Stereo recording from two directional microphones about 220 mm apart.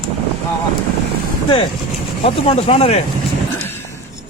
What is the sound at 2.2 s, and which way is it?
Speech, 25° left (ahead or behind).